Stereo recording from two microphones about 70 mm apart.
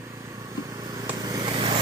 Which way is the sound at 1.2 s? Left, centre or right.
Right.